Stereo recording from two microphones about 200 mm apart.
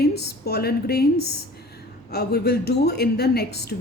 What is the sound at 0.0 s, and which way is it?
A woman's voice, 55° left (ahead or behind).